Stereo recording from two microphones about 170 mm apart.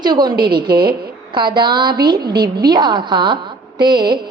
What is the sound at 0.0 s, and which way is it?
Speech, 25° right (ahead or behind).